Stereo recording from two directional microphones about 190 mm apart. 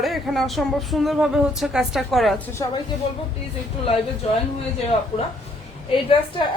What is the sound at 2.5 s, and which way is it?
Speech, 15° left (ahead or behind).